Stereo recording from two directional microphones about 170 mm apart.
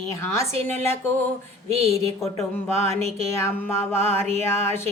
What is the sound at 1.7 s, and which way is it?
Speech, 35° right (ahead or behind).